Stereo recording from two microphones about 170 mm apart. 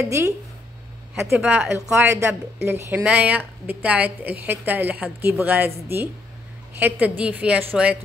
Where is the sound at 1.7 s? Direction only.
15° right (ahead or behind).